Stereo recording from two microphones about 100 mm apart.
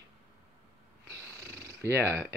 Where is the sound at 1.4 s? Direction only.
25° right (ahead or behind).